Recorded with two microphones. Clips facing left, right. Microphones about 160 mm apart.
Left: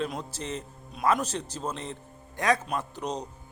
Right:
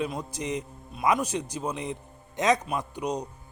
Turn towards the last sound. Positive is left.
turn(degrees=-10)  # may be behind; listen again after turning